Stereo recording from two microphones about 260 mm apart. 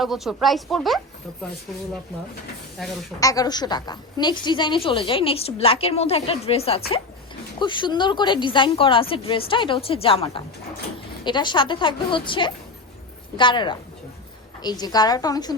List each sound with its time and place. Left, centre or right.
0.0 s speech: centre
2.8 s speech: centre
3.2 s a woman's voice: centre